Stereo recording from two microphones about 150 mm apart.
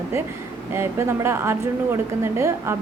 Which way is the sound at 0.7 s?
15° right (ahead or behind).